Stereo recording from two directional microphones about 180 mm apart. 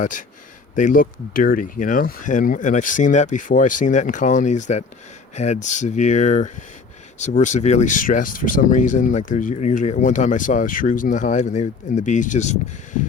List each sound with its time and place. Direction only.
0.0 s speech: 45° left (ahead or behind)